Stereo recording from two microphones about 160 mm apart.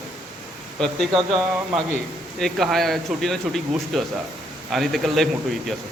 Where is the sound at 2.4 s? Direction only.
Centre (ahead or behind).